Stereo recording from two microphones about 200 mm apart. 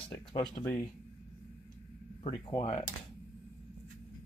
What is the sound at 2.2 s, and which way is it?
Speech, 30° left (ahead or behind).